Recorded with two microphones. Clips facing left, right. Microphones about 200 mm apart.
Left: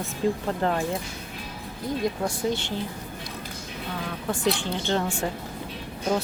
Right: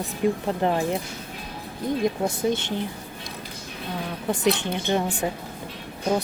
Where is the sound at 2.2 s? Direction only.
20° right (ahead or behind).